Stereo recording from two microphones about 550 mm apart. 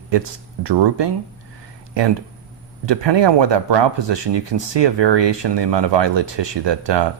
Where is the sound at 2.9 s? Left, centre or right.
Right.